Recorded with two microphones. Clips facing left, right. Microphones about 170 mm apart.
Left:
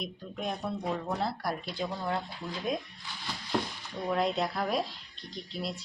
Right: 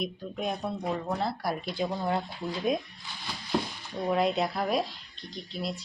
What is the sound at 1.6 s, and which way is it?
Speech, 15° right (ahead or behind).